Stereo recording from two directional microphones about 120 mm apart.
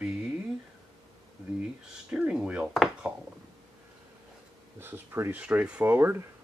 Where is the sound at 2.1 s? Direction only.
10° right (ahead or behind).